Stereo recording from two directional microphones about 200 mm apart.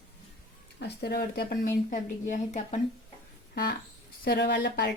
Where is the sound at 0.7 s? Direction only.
55° left (ahead or behind).